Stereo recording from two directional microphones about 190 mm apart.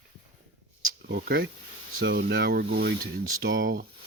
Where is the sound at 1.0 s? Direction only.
55° right (ahead or behind).